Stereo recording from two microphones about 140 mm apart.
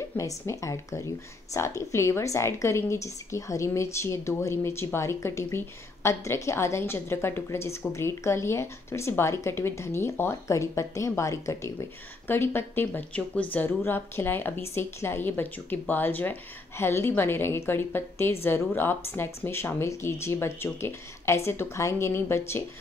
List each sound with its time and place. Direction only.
0.2 s a woman's voice: 20° left (ahead or behind)